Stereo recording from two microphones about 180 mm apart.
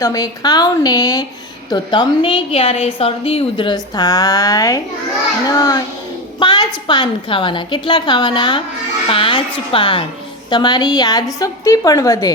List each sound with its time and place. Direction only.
0.0 s a woman's voice: 20° left (ahead or behind)